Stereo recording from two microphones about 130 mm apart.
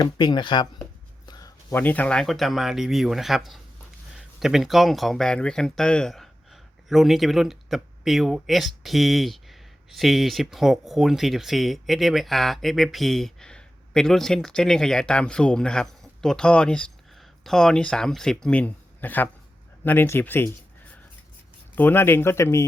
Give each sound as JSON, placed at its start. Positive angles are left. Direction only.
{"t": 0.0, "sound": "speech", "side_deg": 35}
{"t": 1.3, "sound": "a sound", "side_deg": 30}
{"t": 1.7, "sound": "speech", "side_deg": 15}